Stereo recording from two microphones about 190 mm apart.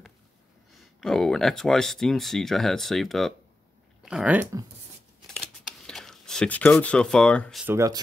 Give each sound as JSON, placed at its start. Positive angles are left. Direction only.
{"t": 0.7, "sound": "speech", "side_deg": 0}
{"t": 5.2, "sound": "scissors", "side_deg": 5}
{"t": 7.6, "sound": "speech", "side_deg": -15}